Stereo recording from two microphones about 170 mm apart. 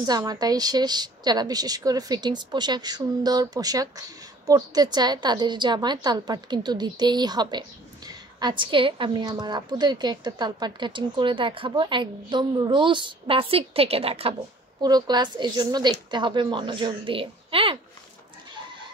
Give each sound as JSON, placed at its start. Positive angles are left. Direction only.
{"t": 0.0, "sound": "a woman's voice", "side_deg": -25}
{"t": 14.8, "sound": "a woman's voice", "side_deg": -25}